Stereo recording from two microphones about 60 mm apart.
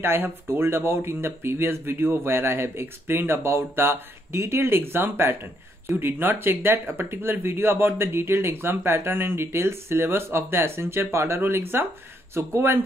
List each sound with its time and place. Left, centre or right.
0.0 s speech: right